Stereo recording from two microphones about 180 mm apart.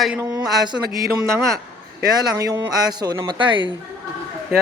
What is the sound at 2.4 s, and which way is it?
Speech, 20° right (ahead or behind).